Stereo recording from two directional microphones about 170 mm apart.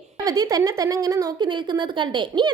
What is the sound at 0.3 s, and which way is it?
A woman's voice, 20° right (ahead or behind).